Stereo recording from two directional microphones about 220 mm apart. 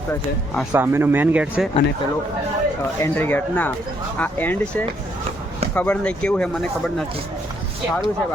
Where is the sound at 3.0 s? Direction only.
10° left (ahead or behind).